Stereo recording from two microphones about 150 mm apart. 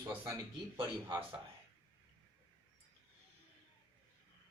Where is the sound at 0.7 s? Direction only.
35° right (ahead or behind).